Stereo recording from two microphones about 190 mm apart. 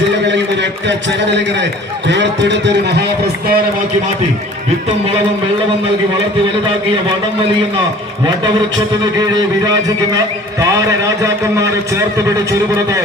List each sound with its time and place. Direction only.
0.3 s a man's voice: 65° right (ahead or behind)